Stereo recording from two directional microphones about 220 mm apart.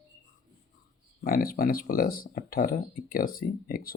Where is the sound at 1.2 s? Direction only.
40° left (ahead or behind).